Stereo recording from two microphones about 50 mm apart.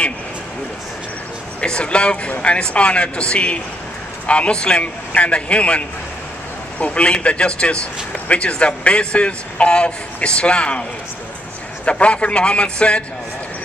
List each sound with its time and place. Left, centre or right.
1.6 s speech: left